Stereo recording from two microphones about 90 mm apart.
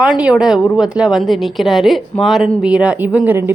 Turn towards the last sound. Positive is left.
turn(degrees=-20)  # may be behind; listen again after turning